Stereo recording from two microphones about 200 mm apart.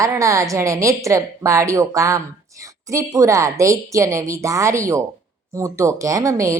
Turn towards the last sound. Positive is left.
turn(degrees=-15)  # may be behind; listen again after turning